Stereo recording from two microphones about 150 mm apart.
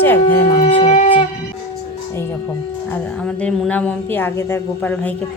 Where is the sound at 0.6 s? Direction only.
45° left (ahead or behind).